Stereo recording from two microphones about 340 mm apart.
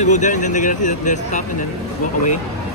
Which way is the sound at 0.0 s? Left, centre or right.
Left.